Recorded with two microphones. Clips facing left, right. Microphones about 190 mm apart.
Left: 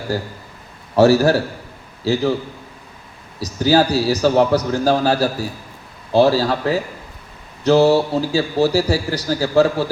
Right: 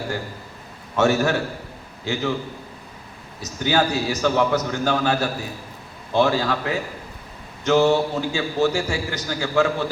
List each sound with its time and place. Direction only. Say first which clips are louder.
0.9 s a man's voice: left 6 dB; 35° left (ahead or behind)
3.4 s a man's voice: left 6 dB; 35° left (ahead or behind)